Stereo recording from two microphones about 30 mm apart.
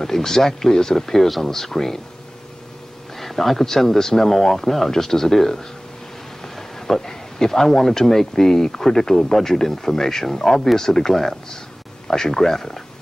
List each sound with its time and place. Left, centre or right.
0.0 s speech: centre
3.2 s speech: centre
6.4 s a sound: centre
7.1 s speech: centre